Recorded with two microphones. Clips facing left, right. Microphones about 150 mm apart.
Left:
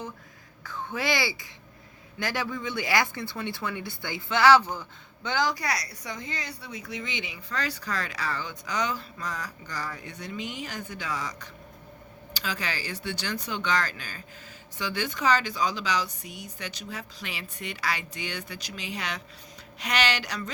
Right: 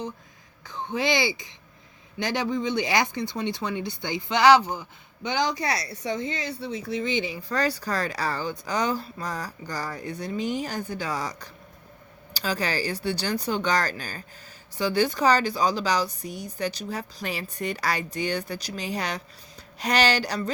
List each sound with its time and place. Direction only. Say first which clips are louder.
0.6 s speech: right 4 dB; 20° right (ahead or behind)